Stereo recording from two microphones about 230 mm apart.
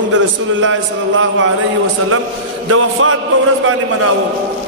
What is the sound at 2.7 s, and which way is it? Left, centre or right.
Speech, right.